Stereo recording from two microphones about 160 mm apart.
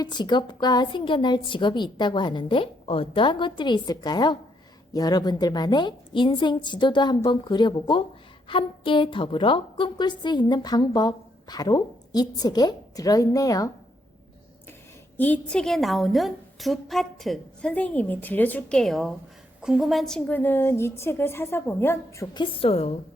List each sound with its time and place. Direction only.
0.0 s a woman's voice: 25° left (ahead or behind)
15.2 s a woman's voice: 10° left (ahead or behind)
22.4 s a woman's voice: 40° left (ahead or behind)